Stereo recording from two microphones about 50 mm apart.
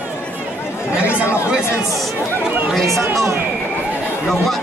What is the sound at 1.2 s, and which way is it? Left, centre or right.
Speech, left.